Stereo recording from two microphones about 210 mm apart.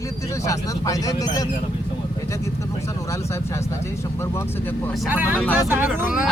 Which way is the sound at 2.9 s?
15° left (ahead or behind).